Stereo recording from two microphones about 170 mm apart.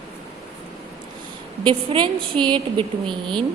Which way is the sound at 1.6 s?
30° right (ahead or behind).